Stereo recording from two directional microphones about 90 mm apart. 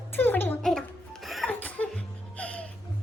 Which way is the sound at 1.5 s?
15° left (ahead or behind).